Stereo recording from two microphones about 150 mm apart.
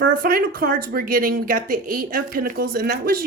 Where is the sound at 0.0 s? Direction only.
70° right (ahead or behind).